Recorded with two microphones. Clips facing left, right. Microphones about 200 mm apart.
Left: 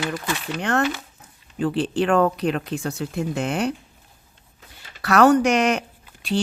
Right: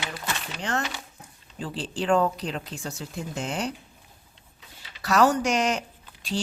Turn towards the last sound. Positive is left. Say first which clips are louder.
# left 6 dB
turn(degrees=60)  # may be behind; listen again after turning